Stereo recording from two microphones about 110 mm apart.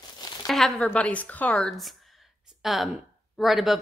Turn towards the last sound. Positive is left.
turn(degrees=0)  # may be behind; listen again after turning